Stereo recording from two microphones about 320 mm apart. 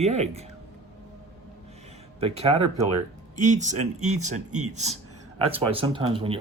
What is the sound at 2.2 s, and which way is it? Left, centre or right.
A man's voice, centre.